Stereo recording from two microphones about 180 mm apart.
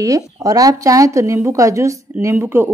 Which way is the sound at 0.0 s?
20° right (ahead or behind).